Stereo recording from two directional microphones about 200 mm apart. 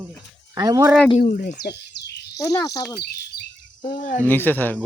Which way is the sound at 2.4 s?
15° left (ahead or behind).